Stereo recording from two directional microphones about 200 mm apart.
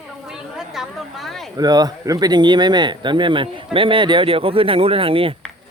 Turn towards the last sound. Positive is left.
turn(degrees=-25)  # may be behind; listen again after turning